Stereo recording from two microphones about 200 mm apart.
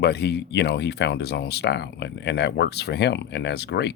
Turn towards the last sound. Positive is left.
turn(degrees=55)  # may be behind; listen again after turning